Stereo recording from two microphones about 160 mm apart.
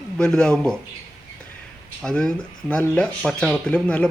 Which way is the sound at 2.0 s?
5° left (ahead or behind).